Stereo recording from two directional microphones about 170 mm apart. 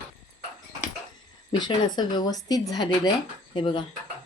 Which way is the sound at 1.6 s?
25° left (ahead or behind).